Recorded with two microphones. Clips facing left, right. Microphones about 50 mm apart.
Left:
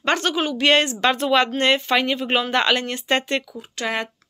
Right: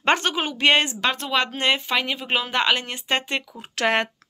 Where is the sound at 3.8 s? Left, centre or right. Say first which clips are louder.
Right 4 dB; right.